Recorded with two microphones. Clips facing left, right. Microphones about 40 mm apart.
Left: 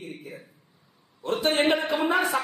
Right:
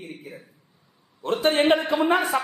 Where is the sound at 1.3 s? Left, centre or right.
Right.